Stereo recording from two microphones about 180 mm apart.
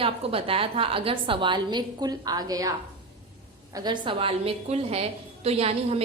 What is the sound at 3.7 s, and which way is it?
A woman's voice, 25° right (ahead or behind).